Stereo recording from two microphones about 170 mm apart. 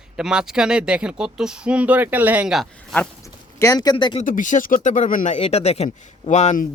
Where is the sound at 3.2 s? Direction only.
20° left (ahead or behind).